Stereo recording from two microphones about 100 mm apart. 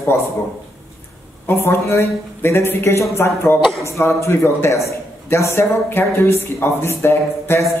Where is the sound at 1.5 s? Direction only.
25° left (ahead or behind).